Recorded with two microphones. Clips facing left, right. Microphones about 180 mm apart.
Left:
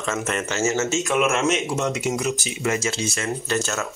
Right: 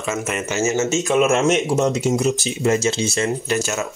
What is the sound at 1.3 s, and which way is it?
Speech, 30° right (ahead or behind).